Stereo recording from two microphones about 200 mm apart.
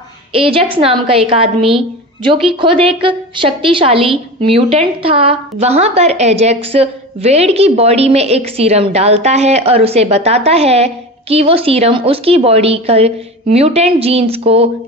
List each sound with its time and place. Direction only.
0.3 s a woman's voice: 25° right (ahead or behind)